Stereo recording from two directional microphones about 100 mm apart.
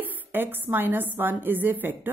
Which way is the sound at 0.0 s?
20° right (ahead or behind).